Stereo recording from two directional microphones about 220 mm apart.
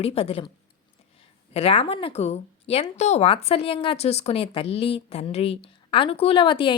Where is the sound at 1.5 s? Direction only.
25° left (ahead or behind).